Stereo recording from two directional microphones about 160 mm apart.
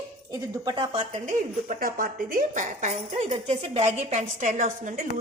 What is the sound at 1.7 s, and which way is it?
A woman's voice, 60° right (ahead or behind).